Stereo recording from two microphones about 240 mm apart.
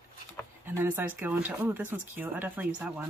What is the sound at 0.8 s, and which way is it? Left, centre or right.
Speech, centre.